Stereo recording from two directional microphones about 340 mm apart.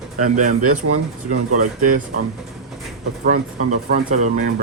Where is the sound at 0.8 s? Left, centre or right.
Right.